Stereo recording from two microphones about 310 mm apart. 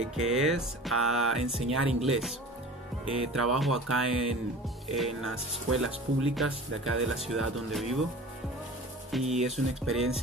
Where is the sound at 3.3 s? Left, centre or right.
Centre.